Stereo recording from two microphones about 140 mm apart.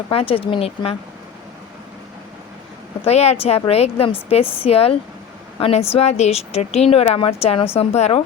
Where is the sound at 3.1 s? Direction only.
50° left (ahead or behind).